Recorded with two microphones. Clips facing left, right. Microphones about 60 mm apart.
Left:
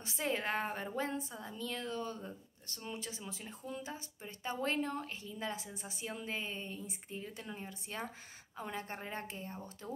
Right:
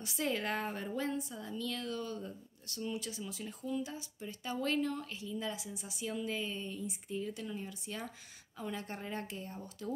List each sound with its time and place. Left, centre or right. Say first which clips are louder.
0.0 s a woman's voice: right 1 dB; left